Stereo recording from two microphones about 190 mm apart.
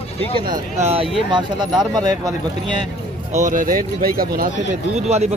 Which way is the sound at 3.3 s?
40° right (ahead or behind).